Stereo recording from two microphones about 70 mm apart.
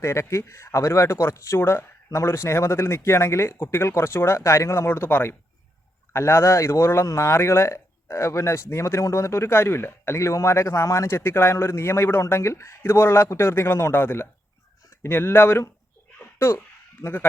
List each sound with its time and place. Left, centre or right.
0.0 s speech: left
4.9 s speech: left
17.0 s speech: left